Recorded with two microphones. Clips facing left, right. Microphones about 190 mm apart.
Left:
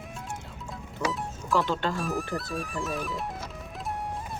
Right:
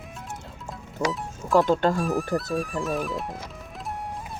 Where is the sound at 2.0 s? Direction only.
Centre (ahead or behind).